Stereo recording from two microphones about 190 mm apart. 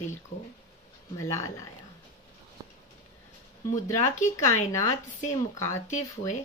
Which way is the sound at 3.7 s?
40° left (ahead or behind).